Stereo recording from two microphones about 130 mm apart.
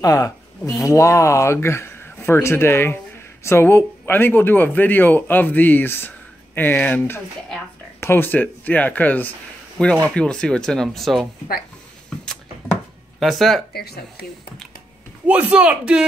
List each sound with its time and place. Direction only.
0.0 s a man's voice: 25° left (ahead or behind); by 11.2 s centre (ahead or behind)
13.2 s speech: centre (ahead or behind)
15.2 s a man's voice: 10° right (ahead or behind)